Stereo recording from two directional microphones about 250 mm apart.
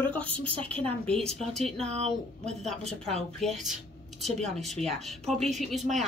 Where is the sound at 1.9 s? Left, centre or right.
Right.